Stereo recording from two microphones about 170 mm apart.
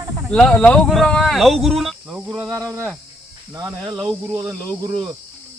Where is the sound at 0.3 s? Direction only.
5° left (ahead or behind).